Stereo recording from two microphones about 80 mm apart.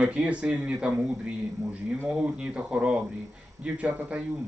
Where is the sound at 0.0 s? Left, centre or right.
Centre.